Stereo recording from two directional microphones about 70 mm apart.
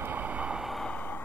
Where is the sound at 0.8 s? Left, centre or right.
Left.